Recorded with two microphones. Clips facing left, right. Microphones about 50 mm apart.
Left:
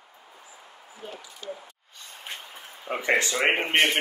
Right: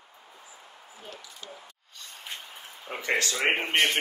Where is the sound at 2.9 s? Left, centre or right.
Left.